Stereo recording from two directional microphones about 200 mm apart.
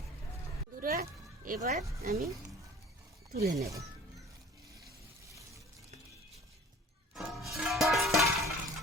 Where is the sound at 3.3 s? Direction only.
50° right (ahead or behind).